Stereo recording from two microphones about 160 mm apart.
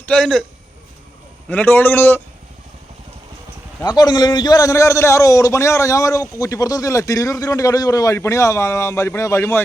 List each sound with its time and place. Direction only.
0.0 s a man's voice: 5° left (ahead or behind)
1.5 s a man's voice: 10° left (ahead or behind)
3.8 s a man's voice: 25° left (ahead or behind)